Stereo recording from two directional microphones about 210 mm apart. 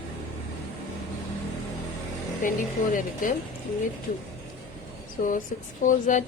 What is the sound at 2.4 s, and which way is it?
Speech, 40° left (ahead or behind).